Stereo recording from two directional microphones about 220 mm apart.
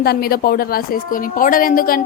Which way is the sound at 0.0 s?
45° left (ahead or behind).